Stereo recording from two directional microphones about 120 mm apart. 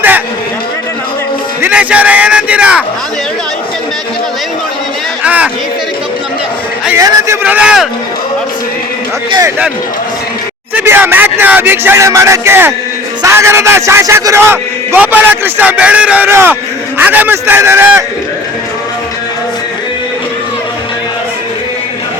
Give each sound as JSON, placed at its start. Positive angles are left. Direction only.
{"t": 1.6, "sound": "a man's voice", "side_deg": -10}
{"t": 5.2, "sound": "chatter", "side_deg": -10}
{"t": 6.9, "sound": "speech", "side_deg": -25}
{"t": 7.4, "sound": "a man's voice", "side_deg": -10}
{"t": 10.8, "sound": "speech", "side_deg": -15}